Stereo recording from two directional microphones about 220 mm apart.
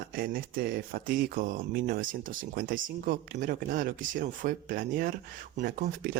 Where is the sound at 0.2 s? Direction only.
40° right (ahead or behind).